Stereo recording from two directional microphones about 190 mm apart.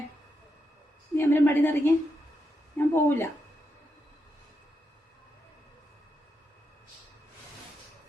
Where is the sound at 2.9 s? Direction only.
10° left (ahead or behind).